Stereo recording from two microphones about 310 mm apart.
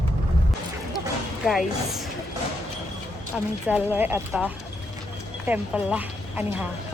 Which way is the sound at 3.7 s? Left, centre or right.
Centre.